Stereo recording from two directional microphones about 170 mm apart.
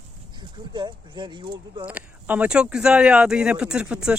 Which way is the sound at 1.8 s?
10° right (ahead or behind).